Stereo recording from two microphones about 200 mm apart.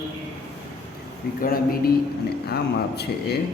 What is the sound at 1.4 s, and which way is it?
Speech, 50° left (ahead or behind).